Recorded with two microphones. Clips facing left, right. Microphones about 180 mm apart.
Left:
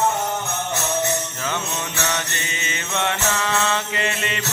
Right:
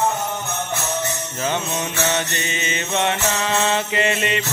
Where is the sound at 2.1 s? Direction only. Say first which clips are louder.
Right 4 dB; 20° right (ahead or behind).